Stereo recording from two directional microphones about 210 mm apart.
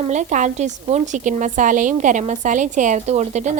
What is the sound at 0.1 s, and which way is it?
A woman's voice, 35° right (ahead or behind).